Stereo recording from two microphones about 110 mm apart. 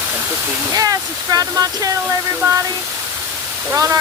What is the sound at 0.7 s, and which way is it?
Speech, 35° right (ahead or behind).